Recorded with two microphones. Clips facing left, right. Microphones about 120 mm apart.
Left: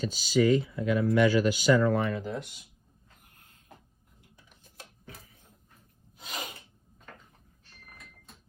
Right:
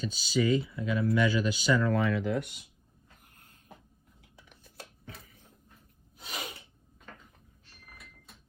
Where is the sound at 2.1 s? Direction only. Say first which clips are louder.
Right 4 dB; 75° right (ahead or behind).